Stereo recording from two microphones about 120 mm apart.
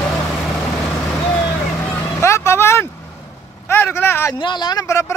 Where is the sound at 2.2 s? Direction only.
25° left (ahead or behind).